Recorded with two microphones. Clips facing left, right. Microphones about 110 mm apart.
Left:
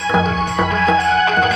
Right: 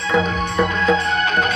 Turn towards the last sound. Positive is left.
turn(degrees=90)